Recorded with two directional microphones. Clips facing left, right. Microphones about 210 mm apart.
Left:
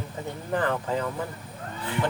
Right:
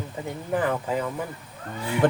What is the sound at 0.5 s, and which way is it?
Speech, 10° right (ahead or behind).